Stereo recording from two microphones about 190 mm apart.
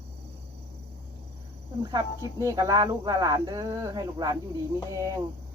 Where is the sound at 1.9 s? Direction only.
15° right (ahead or behind).